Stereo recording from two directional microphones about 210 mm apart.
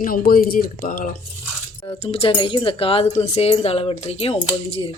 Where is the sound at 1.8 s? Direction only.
25° left (ahead or behind).